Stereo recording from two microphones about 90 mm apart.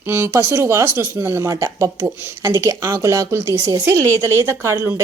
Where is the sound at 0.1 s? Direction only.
30° right (ahead or behind).